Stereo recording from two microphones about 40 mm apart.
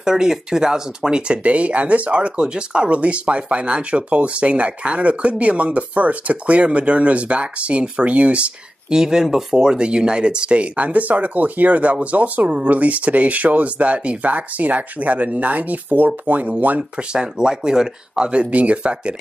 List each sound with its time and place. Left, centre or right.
0.0 s speech: centre
2.9 s speech: right
8.9 s speech: centre; by 16.8 s right
17.1 s speech: right
18.5 s speech: right